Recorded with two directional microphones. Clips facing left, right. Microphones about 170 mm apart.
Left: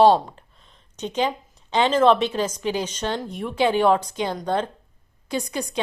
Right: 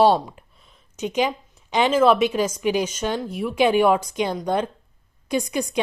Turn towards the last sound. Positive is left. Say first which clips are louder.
# right 3 dB
turn(degrees=-15)  # may be behind; listen again after turning